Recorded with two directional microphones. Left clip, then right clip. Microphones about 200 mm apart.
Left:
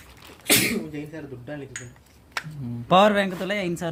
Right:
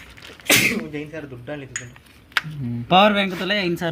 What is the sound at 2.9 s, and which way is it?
A man's voice, 25° left (ahead or behind).